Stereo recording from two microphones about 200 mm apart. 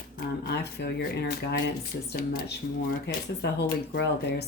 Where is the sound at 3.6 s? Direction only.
55° left (ahead or behind).